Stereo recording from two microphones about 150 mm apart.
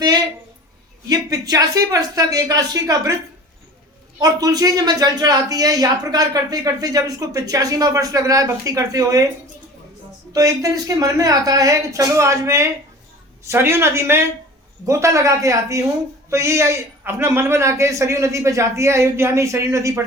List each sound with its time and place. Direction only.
1.0 s speech: 25° right (ahead or behind)
4.2 s speech: 25° right (ahead or behind)
10.3 s speech: 25° right (ahead or behind)